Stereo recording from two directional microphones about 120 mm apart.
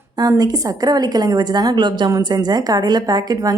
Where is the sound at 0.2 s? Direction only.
35° right (ahead or behind).